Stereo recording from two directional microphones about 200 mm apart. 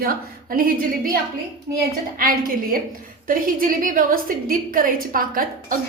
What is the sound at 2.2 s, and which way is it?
A woman's voice, 45° right (ahead or behind).